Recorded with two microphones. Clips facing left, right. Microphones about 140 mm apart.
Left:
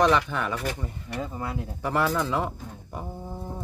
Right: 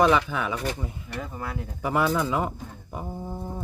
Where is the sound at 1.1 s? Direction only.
20° left (ahead or behind).